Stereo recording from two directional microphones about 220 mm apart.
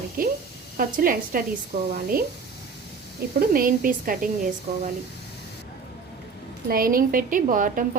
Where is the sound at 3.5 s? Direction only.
40° right (ahead or behind).